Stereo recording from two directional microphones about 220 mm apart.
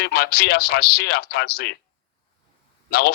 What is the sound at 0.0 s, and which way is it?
A man's voice, 45° left (ahead or behind).